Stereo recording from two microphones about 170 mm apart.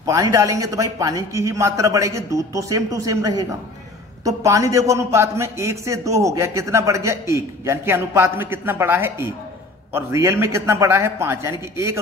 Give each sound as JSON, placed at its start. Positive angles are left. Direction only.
{"t": 0.0, "sound": "a man's voice", "side_deg": -20}